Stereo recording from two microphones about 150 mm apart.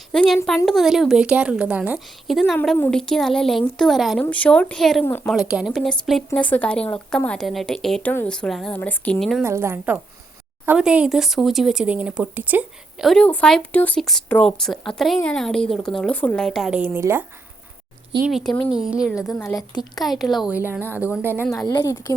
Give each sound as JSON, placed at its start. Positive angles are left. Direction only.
{"t": 0.1, "sound": "a woman's voice", "side_deg": 5}
{"t": 2.3, "sound": "speech", "side_deg": 0}
{"t": 5.0, "sound": "speech", "side_deg": 15}
{"t": 5.3, "sound": "speech", "side_deg": -5}
{"t": 9.4, "sound": "a woman's voice", "side_deg": -20}
{"t": 13.1, "sound": "speech", "side_deg": 5}
{"t": 16.8, "sound": "a woman's voice", "side_deg": -15}
{"t": 18.3, "sound": "a woman's voice", "side_deg": 0}
{"t": 21.7, "sound": "speech", "side_deg": 30}